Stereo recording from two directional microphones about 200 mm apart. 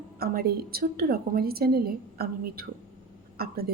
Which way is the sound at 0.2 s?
50° right (ahead or behind).